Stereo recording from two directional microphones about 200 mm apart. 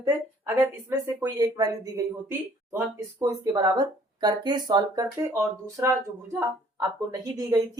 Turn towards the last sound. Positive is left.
turn(degrees=-15)  # may be behind; listen again after turning